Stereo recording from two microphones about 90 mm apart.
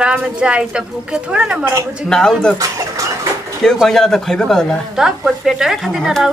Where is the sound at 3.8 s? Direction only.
5° left (ahead or behind).